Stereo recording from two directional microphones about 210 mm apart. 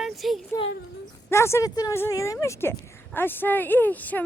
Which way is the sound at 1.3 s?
10° left (ahead or behind).